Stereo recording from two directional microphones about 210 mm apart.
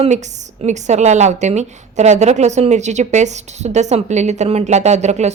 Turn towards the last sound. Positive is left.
turn(degrees=-30)  # may be behind; listen again after turning